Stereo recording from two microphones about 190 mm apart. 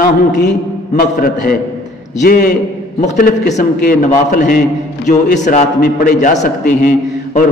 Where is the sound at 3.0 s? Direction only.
40° left (ahead or behind).